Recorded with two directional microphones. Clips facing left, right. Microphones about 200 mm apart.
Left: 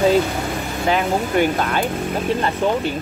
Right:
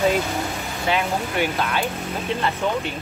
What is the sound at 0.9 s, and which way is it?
Speech, 45° left (ahead or behind).